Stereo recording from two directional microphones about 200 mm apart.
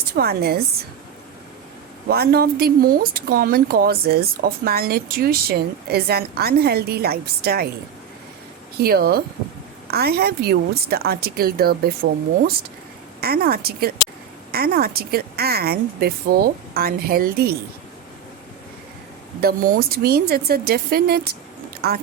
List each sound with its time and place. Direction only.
0.1 s speech: 50° right (ahead or behind)
2.0 s speech: 50° right (ahead or behind)
8.8 s speech: 50° right (ahead or behind)
13.2 s speech: 50° right (ahead or behind)
19.4 s speech: 45° right (ahead or behind)